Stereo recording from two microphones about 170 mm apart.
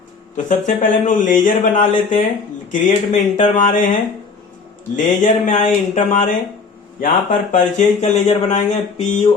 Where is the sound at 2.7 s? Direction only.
45° left (ahead or behind).